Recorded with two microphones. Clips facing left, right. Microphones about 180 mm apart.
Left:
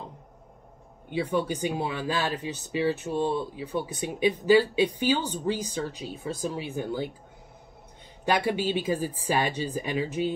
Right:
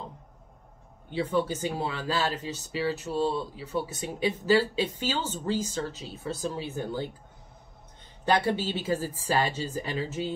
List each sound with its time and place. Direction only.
1.1 s speech: 15° left (ahead or behind)
8.3 s speech: 10° left (ahead or behind)